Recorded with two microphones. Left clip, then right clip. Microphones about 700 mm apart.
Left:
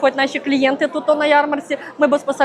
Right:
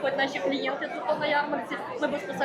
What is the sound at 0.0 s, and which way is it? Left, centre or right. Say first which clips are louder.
A woman's voice: left 9 dB; left.